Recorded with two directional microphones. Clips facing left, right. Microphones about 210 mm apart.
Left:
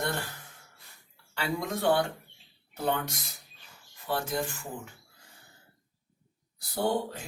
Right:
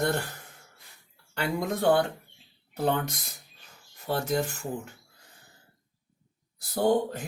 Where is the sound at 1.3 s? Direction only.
45° right (ahead or behind).